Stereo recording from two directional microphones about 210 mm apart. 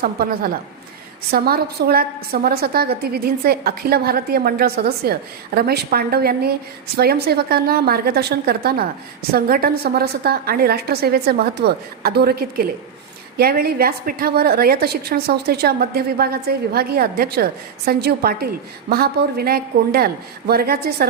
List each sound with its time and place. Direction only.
0.0 s a woman's voice: 45° right (ahead or behind)